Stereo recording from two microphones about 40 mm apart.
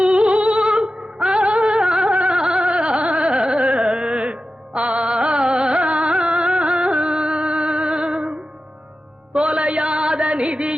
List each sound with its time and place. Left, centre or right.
0.0 s music: right
2.1 s gargling: right
2.4 s a sound: right
9.3 s music: right